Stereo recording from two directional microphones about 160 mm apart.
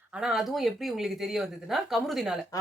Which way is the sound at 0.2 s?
5° right (ahead or behind).